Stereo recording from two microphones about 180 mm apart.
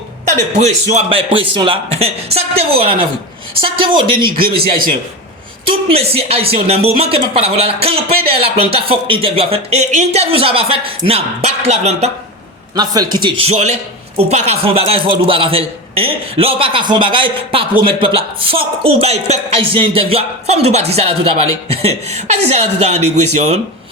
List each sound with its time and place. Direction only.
0.6 s a man's voice: 40° right (ahead or behind)
4.3 s speech: 55° right (ahead or behind)
5.6 s a man's voice: 35° right (ahead or behind)
12.7 s a man's voice: 20° right (ahead or behind); by 23.6 s 40° right (ahead or behind)